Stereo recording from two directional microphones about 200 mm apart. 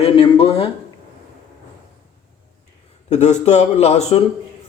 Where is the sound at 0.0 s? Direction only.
25° left (ahead or behind).